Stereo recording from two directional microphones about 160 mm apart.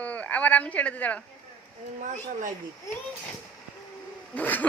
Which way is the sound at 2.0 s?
55° right (ahead or behind).